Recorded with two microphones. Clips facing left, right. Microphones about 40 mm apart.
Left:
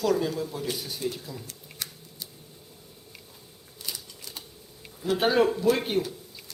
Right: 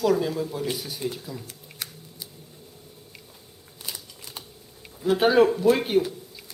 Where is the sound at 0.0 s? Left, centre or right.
Centre.